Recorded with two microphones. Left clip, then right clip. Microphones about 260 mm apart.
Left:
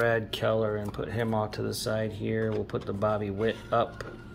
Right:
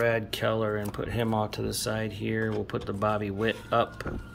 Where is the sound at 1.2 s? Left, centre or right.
Right.